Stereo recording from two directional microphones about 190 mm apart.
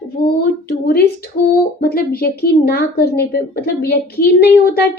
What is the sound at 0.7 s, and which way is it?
A woman's voice, 55° left (ahead or behind).